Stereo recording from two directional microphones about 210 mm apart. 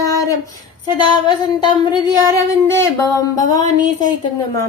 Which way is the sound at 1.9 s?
20° left (ahead or behind).